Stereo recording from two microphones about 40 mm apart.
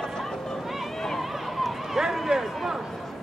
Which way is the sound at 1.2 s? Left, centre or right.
Centre.